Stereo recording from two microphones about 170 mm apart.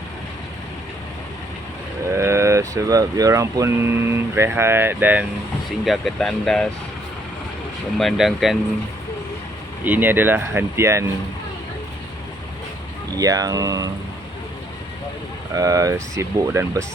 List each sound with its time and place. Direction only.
2.0 s speech: 15° right (ahead or behind)
5.8 s speech: centre (ahead or behind)
7.9 s speech: centre (ahead or behind)
9.8 s speech: 10° right (ahead or behind)
13.1 s speech: 20° right (ahead or behind)
15.5 s speech: 20° right (ahead or behind)